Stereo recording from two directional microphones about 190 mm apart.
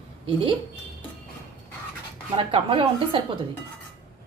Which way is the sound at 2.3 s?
30° right (ahead or behind).